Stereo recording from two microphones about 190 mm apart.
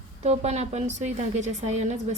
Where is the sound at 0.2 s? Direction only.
35° right (ahead or behind).